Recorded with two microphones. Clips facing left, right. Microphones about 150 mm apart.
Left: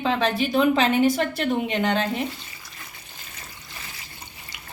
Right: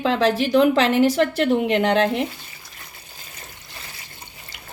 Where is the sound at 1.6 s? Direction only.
75° right (ahead or behind).